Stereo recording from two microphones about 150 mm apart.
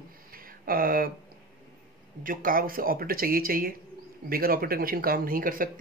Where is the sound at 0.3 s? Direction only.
75° right (ahead or behind).